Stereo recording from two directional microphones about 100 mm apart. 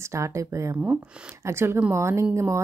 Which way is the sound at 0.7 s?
15° right (ahead or behind).